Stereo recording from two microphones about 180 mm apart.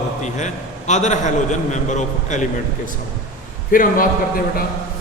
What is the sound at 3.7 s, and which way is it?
Speech, 50° left (ahead or behind).